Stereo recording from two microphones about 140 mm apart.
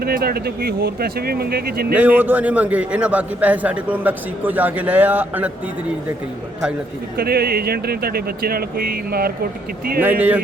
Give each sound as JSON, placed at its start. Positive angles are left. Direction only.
{"t": 0.0, "sound": "speech", "side_deg": -90}
{"t": 1.9, "sound": "a man's voice", "side_deg": -10}
{"t": 7.2, "sound": "speech", "side_deg": -90}
{"t": 10.0, "sound": "a man's voice", "side_deg": -10}